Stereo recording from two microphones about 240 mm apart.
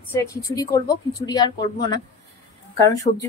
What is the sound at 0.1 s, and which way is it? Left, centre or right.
A woman's voice, centre.